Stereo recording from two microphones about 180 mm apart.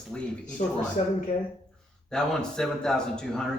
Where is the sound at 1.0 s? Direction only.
35° left (ahead or behind).